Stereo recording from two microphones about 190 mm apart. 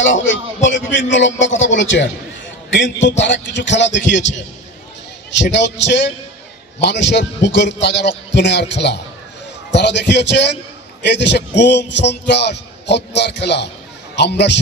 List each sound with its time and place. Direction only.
0.0 s a man's voice: 75° left (ahead or behind)